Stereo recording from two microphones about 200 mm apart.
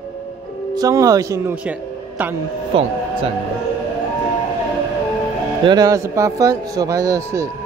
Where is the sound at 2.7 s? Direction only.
25° right (ahead or behind).